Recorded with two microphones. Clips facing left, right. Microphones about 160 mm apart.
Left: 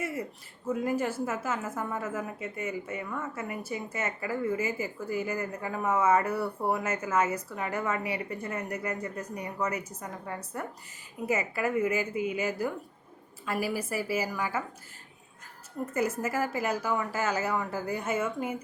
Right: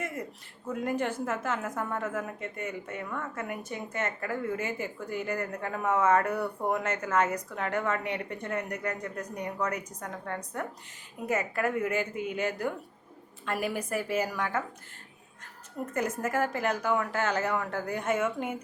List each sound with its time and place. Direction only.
0.0 s a woman's voice: 5° left (ahead or behind)
15.9 s a woman's voice: 5° left (ahead or behind)